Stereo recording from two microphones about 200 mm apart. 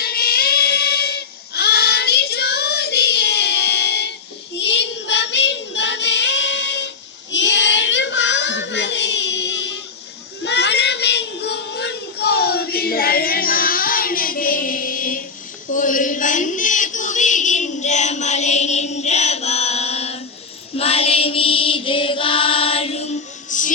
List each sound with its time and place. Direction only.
0.0 s child singing: 50° left (ahead or behind)
10.4 s a sound: 60° left (ahead or behind); by 20.1 s 30° left (ahead or behind)
20.7 s mantra: 30° left (ahead or behind)